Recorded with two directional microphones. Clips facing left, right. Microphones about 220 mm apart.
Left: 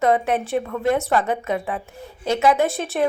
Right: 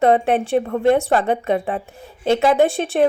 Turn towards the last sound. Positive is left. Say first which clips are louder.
# right 5 dB
turn(degrees=-30)  # may be behind; listen again after turning